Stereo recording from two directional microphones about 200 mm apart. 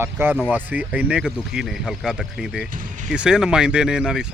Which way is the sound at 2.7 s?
40° right (ahead or behind).